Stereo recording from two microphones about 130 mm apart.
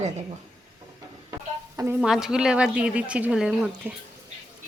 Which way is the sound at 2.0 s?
5° right (ahead or behind).